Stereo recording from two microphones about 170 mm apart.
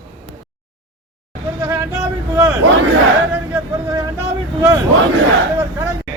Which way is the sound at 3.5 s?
20° right (ahead or behind).